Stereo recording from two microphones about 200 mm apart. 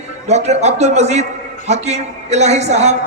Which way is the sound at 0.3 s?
35° right (ahead or behind).